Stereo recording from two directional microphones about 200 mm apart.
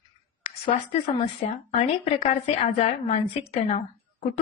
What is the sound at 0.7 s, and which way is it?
A woman's voice, 25° left (ahead or behind).